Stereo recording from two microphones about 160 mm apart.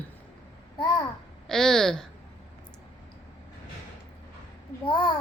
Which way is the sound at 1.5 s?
5° left (ahead or behind).